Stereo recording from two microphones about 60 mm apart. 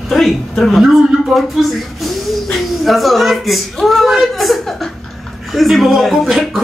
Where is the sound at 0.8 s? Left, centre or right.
Centre.